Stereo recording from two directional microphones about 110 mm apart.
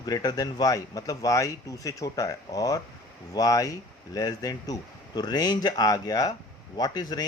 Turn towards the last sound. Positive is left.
turn(degrees=35)  # may be behind; listen again after turning